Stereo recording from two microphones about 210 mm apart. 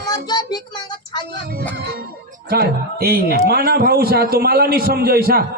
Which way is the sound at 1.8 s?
50° right (ahead or behind).